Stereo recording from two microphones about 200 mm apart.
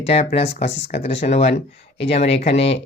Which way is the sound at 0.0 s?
30° left (ahead or behind).